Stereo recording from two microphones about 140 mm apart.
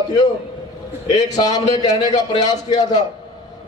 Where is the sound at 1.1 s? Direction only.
25° left (ahead or behind).